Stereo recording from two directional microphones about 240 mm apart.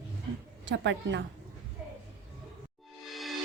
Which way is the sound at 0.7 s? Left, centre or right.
Right.